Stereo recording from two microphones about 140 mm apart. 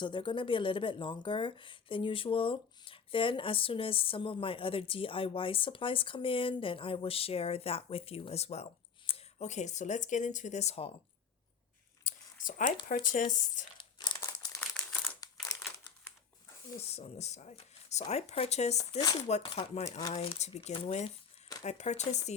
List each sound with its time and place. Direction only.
0.0 s speech: 35° left (ahead or behind)
12.0 s a sound: 70° left (ahead or behind)
13.2 s speech: 70° left (ahead or behind)
13.7 s crumpling: 35° left (ahead or behind)
14.7 s crumpling: 5° left (ahead or behind)
15.0 s crumpling: 25° left (ahead or behind)
16.9 s speech: 50° left (ahead or behind)
18.8 s speech: 25° left (ahead or behind)
19.3 s speech: 50° left (ahead or behind)